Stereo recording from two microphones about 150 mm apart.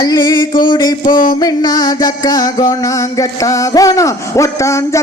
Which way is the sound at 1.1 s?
65° left (ahead or behind).